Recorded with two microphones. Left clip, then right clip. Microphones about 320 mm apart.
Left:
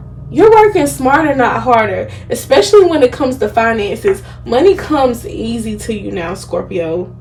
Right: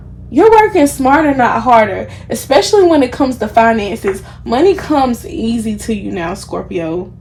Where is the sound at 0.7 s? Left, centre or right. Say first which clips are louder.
Right 1 dB; centre.